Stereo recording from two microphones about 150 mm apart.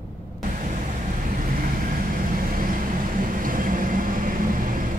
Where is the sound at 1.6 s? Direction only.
70° right (ahead or behind).